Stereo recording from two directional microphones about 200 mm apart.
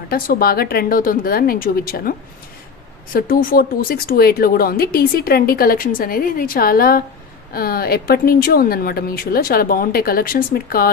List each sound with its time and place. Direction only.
0.1 s speech: 50° left (ahead or behind)